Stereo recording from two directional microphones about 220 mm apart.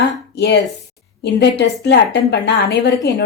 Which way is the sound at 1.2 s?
50° left (ahead or behind).